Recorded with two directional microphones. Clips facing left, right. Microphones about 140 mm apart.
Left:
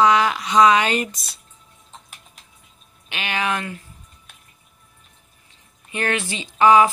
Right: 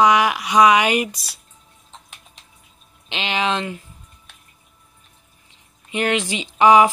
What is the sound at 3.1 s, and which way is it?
Speech, 20° right (ahead or behind).